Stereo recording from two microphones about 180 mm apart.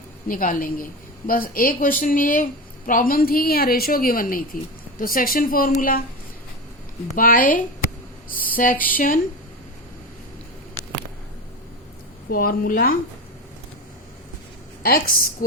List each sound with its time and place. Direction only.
0.3 s a woman's voice: 50° left (ahead or behind)
7.2 s a woman's voice: 50° left (ahead or behind)
12.3 s speech: 55° left (ahead or behind)
14.8 s a woman's voice: 55° left (ahead or behind)